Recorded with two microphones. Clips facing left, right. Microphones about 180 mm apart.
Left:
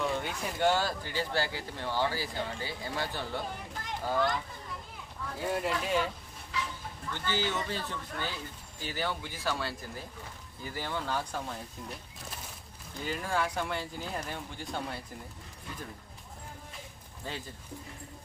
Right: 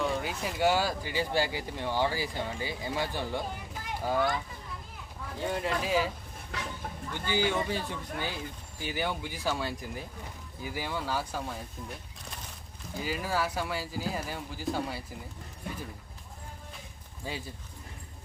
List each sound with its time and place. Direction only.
0.0 s speech: centre (ahead or behind)
5.4 s speech: 5° left (ahead or behind)
6.5 s a sound: 55° right (ahead or behind)
7.1 s speech: 15° right (ahead or behind)
13.0 s speech: 5° right (ahead or behind)
17.2 s speech: 10° right (ahead or behind)